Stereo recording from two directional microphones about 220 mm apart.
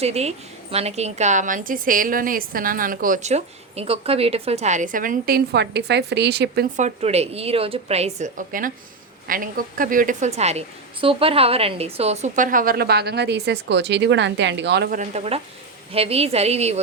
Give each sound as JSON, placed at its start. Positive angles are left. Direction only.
{"t": 0.0, "sound": "a woman's voice", "side_deg": -30}
{"t": 6.7, "sound": "a woman's voice", "side_deg": -30}
{"t": 14.9, "sound": "a woman's voice", "side_deg": -30}